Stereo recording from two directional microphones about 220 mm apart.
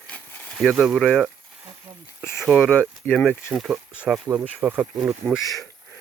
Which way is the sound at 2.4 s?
Centre (ahead or behind).